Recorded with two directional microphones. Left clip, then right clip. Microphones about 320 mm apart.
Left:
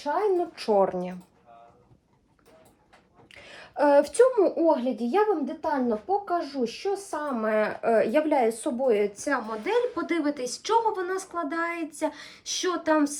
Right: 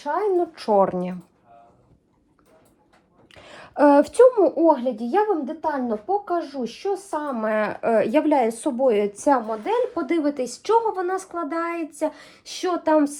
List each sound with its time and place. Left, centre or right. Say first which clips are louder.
0.0 s a woman's voice: right 3 dB; centre
3.3 s a sound: right 6 dB; centre
4.8 s speech: right 3 dB; right
5.7 s a woman's voice: left 1 dB; centre
9.1 s a woman's voice: right 8 dB; centre